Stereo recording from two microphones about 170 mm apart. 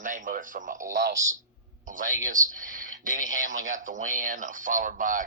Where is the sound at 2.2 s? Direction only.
50° right (ahead or behind).